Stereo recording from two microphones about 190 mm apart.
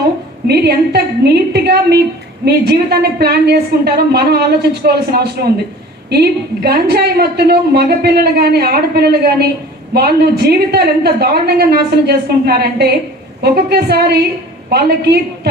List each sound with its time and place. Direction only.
0.4 s a woman's voice: 60° right (ahead or behind)
6.1 s a woman's voice: 55° right (ahead or behind)